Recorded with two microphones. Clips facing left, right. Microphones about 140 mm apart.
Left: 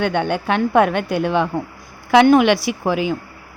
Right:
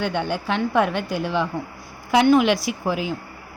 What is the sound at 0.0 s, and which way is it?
A woman's voice, 60° left (ahead or behind).